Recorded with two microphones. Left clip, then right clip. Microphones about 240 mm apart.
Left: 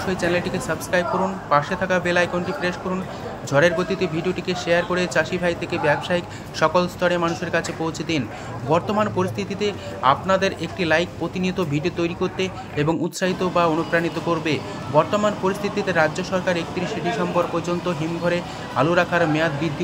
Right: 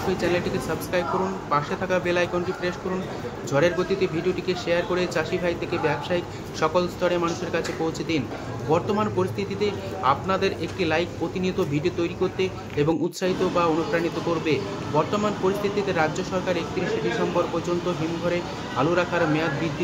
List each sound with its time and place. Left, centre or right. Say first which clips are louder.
0.1 s speech: left 2 dB; centre